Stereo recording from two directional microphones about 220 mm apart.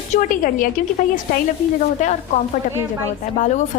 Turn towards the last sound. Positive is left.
turn(degrees=35)  # may be behind; listen again after turning